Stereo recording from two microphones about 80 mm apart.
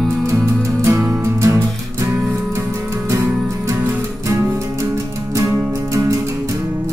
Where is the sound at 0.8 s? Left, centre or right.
Right.